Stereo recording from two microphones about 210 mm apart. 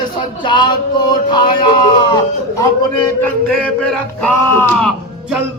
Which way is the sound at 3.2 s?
5° left (ahead or behind).